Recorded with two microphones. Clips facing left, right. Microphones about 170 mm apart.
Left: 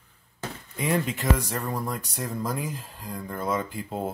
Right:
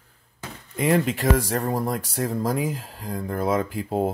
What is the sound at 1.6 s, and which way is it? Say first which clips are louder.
Speech: right 6 dB; 35° right (ahead or behind).